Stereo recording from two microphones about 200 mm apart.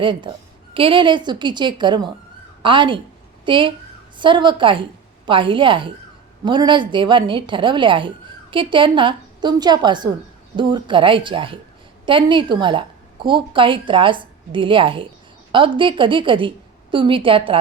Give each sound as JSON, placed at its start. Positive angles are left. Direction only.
{"t": 0.0, "sound": "a woman's voice", "side_deg": -25}